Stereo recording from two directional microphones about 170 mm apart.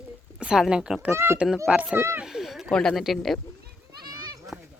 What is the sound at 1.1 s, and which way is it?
Speech, 15° right (ahead or behind).